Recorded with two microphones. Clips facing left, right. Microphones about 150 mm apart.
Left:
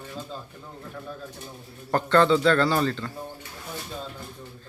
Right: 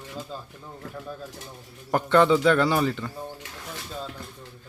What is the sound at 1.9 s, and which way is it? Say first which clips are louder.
Speech: right 1 dB; 15° right (ahead or behind).